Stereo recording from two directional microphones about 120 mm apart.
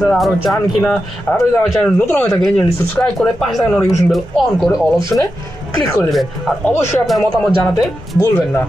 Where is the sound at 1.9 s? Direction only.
15° left (ahead or behind).